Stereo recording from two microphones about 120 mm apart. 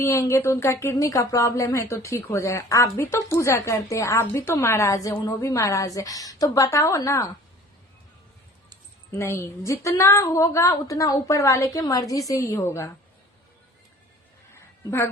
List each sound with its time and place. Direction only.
0.0 s a woman's voice: 25° left (ahead or behind)
9.1 s a woman's voice: 20° left (ahead or behind)
14.5 s a sound: 20° left (ahead or behind)